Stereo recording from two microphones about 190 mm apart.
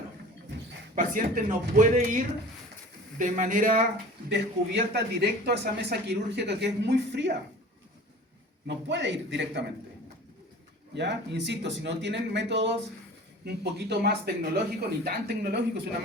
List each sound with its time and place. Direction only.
0.9 s speech: 45° right (ahead or behind)
4.3 s speech: 60° right (ahead or behind)
8.6 s a man's voice: 70° right (ahead or behind)
10.9 s speech: 65° right (ahead or behind)